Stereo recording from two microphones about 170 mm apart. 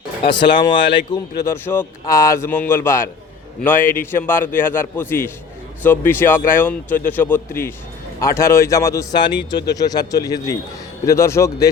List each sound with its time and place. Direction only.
0.2 s speech: 30° left (ahead or behind)